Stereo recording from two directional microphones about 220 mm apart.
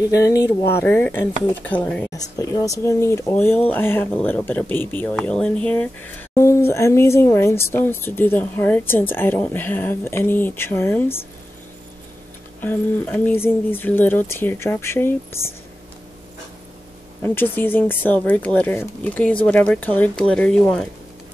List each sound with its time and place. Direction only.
0.2 s speech: 15° left (ahead or behind)
12.5 s speech: 10° left (ahead or behind)
17.2 s speech: 10° left (ahead or behind)